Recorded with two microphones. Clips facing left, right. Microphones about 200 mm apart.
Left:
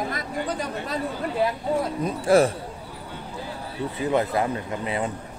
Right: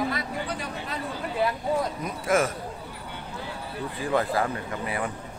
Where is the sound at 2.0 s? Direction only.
30° left (ahead or behind).